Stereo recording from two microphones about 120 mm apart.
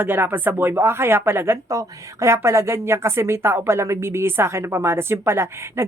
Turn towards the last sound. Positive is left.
turn(degrees=-20)  # may be behind; listen again after turning